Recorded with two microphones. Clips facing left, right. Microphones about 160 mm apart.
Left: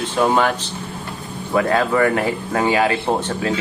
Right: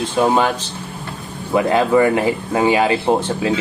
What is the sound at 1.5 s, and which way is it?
Speech, 20° right (ahead or behind).